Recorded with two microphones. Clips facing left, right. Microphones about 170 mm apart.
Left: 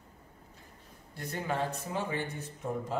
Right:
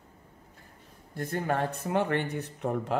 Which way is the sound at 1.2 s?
50° right (ahead or behind).